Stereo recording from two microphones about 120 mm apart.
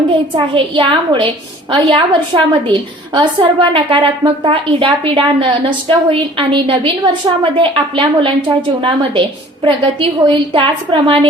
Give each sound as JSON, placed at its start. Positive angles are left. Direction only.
{"t": 0.3, "sound": "a woman's voice", "side_deg": -45}